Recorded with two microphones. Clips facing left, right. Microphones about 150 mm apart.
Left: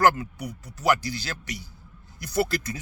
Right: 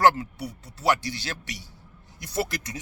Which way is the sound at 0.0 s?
25° right (ahead or behind).